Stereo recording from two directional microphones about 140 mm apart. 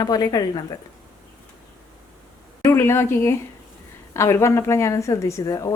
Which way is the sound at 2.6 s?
20° left (ahead or behind).